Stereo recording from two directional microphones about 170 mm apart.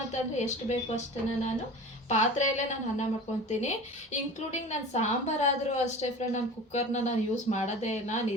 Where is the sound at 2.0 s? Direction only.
45° left (ahead or behind).